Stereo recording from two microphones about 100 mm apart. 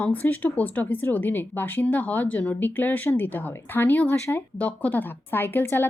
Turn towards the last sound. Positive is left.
turn(degrees=25)  # may be behind; listen again after turning